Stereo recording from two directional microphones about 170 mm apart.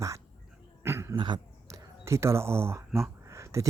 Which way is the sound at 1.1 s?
25° right (ahead or behind).